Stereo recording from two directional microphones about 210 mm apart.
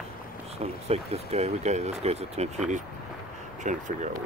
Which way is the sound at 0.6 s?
30° right (ahead or behind).